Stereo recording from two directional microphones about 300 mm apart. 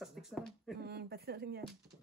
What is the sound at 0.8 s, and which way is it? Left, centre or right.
Speech, right.